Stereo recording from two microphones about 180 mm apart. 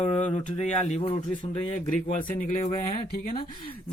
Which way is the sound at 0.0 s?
30° left (ahead or behind).